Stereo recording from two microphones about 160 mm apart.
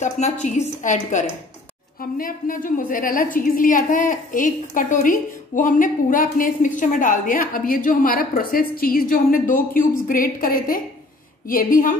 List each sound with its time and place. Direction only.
0.0 s a woman's voice: 45° left (ahead or behind)
2.0 s a woman's voice: 60° left (ahead or behind)